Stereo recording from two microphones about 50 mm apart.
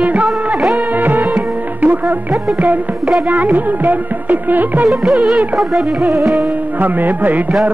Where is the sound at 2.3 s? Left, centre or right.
Right.